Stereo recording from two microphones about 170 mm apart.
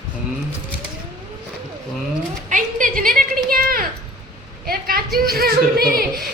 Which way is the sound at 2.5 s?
50° right (ahead or behind).